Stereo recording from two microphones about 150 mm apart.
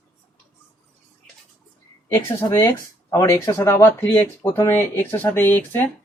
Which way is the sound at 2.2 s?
20° left (ahead or behind).